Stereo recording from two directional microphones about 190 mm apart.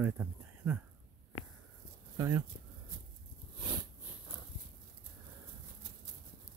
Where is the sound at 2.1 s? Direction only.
20° right (ahead or behind).